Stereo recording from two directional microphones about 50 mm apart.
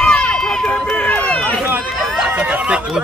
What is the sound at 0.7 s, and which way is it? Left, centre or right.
Run, left.